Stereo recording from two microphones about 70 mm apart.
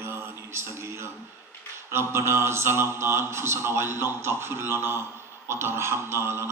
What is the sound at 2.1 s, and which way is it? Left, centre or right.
Music, right.